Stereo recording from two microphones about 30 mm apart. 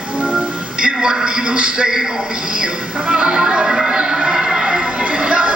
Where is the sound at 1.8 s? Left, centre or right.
Centre.